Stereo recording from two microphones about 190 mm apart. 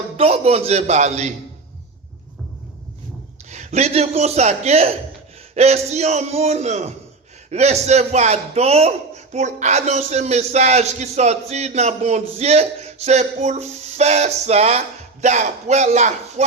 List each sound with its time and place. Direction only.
0.2 s a man's voice: 30° right (ahead or behind)
3.5 s a man's voice: 35° right (ahead or behind)